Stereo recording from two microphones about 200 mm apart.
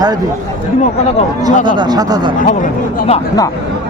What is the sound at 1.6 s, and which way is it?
Speech, 20° right (ahead or behind).